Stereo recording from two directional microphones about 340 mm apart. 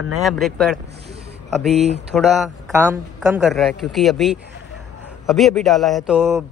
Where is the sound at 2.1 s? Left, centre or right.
Centre.